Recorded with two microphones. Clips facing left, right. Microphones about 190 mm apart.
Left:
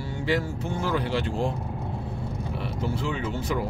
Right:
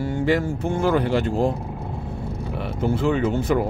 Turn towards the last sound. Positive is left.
turn(degrees=-55)  # may be behind; listen again after turning